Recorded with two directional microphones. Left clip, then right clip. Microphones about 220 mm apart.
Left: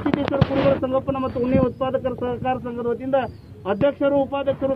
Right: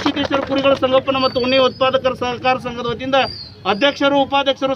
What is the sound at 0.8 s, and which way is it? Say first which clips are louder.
A man's voice: right 8 dB; 40° right (ahead or behind).